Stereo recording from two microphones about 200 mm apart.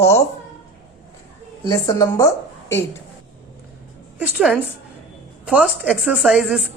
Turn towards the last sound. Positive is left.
turn(degrees=-5)  # may be behind; listen again after turning